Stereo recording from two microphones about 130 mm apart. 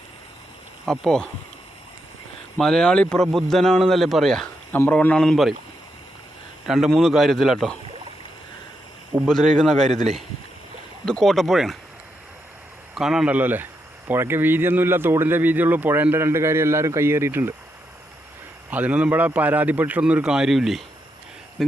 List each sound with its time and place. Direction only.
0.9 s a man's voice: 5° left (ahead or behind)
2.6 s a man's voice: 5° left (ahead or behind)
4.7 s a man's voice: 15° left (ahead or behind)
6.7 s a man's voice: centre (ahead or behind)
9.2 s a man's voice: centre (ahead or behind)
11.0 s a man's voice: 5° left (ahead or behind)
12.9 s a man's voice: 5° right (ahead or behind)
18.7 s a man's voice: 10° right (ahead or behind)